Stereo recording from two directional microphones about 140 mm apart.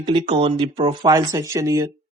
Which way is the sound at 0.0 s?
35° right (ahead or behind).